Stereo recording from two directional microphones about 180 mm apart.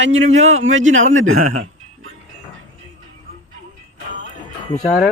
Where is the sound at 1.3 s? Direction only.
45° right (ahead or behind).